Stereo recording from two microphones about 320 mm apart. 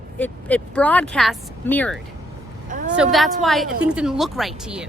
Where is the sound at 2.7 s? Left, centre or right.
Right.